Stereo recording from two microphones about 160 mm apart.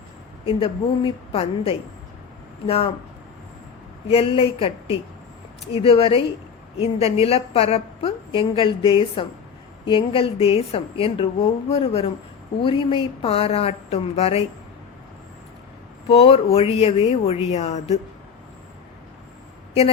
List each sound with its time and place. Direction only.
0.4 s a woman's voice: 35° left (ahead or behind)
4.1 s a woman's voice: 35° left (ahead or behind)
16.0 s a woman's voice: 35° left (ahead or behind)